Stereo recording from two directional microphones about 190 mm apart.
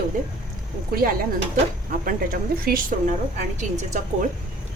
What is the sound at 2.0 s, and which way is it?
A woman's voice, 50° right (ahead or behind).